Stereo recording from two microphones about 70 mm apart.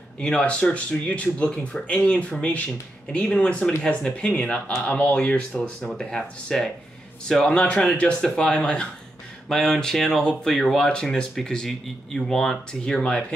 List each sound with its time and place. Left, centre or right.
0.2 s speech: centre